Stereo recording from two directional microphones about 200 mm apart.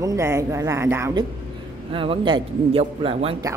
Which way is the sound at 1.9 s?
25° right (ahead or behind).